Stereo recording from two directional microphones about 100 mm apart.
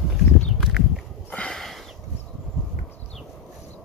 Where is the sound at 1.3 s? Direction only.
10° left (ahead or behind).